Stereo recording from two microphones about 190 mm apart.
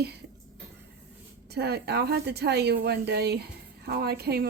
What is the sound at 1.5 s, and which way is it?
A woman's voice, 60° right (ahead or behind).